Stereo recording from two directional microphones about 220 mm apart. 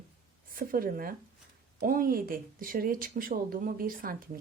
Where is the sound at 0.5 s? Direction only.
40° right (ahead or behind).